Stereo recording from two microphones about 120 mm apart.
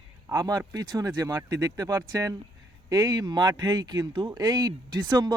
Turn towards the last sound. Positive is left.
turn(degrees=-35)  # may be behind; listen again after turning